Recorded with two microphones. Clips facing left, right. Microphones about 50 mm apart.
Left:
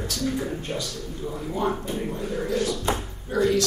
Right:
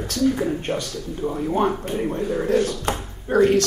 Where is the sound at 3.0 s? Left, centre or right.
Right.